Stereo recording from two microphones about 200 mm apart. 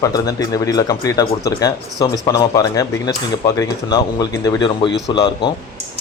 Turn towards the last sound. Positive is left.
turn(degrees=20)  # may be behind; listen again after turning